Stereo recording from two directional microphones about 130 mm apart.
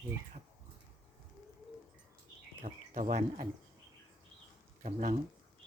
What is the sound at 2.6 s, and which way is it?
Speech, 85° right.